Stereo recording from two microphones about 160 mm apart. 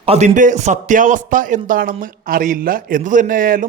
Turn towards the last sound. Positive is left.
turn(degrees=-60)  # may be behind; listen again after turning